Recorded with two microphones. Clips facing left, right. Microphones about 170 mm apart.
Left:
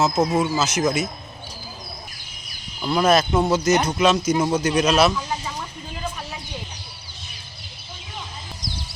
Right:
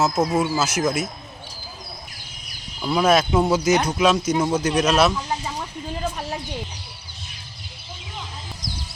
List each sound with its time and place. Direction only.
0.0 s speech: 5° right (ahead or behind)
2.8 s speech: centre (ahead or behind)